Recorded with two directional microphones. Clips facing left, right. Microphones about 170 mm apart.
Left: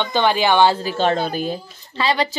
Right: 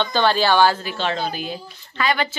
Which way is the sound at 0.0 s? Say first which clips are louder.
Left 1 dB; 15° left (ahead or behind).